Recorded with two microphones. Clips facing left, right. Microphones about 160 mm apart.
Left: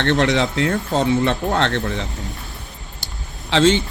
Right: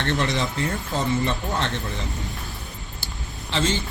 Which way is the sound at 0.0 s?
70° left (ahead or behind).